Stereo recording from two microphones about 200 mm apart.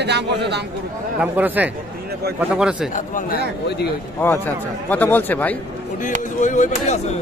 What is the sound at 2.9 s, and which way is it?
Speech, 45° left (ahead or behind).